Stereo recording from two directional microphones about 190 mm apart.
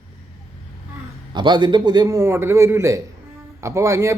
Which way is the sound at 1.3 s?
25° right (ahead or behind).